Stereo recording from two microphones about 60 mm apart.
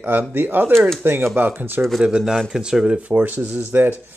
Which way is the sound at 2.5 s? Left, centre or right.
Centre.